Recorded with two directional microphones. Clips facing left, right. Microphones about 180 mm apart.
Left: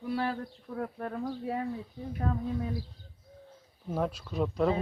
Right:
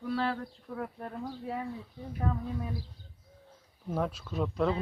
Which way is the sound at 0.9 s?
55° left (ahead or behind).